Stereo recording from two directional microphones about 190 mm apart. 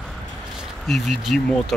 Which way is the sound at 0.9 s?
Centre (ahead or behind).